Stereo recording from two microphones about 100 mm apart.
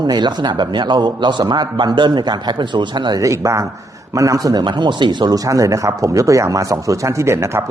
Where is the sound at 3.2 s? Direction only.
30° right (ahead or behind).